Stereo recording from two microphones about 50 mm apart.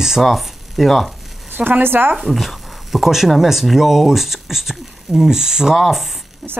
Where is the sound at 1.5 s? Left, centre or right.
Right.